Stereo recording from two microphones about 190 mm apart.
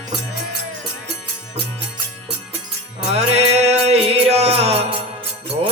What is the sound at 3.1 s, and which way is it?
Music, 35° right (ahead or behind).